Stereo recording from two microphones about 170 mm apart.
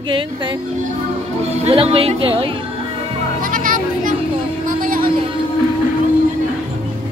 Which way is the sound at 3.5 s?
50° right (ahead or behind).